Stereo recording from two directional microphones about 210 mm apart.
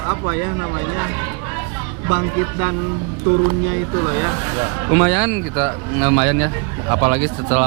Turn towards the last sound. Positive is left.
turn(degrees=-10)  # may be behind; listen again after turning